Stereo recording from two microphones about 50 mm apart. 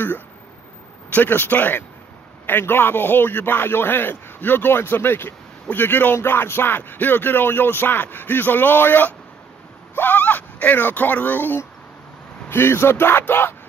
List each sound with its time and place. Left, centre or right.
1.1 s a man's voice: left
6.2 s speech: left
12.4 s a man's voice: left